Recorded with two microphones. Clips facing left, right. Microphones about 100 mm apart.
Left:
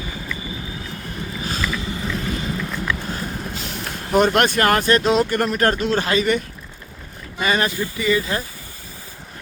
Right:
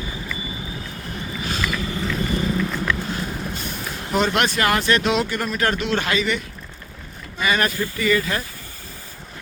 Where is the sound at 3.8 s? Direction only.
50° left (ahead or behind).